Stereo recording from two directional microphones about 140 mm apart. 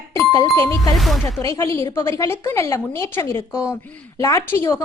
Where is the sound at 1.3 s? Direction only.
20° left (ahead or behind).